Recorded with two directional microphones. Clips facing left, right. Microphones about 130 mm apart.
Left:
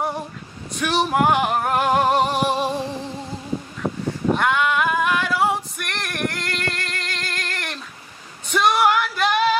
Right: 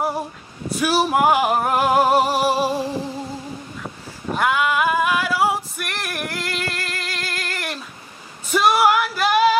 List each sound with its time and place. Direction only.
0.7 s male singing: 5° right (ahead or behind)
3.8 s a sound: 30° left (ahead or behind)
4.4 s female singing: 5° right (ahead or behind)